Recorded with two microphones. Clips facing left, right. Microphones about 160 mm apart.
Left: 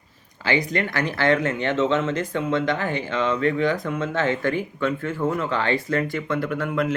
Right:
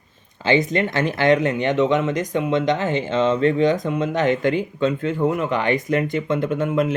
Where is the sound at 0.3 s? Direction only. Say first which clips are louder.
Right 5 dB; 20° right (ahead or behind).